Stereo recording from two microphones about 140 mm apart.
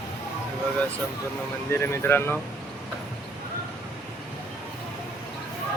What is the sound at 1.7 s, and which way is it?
Speech, 15° left (ahead or behind).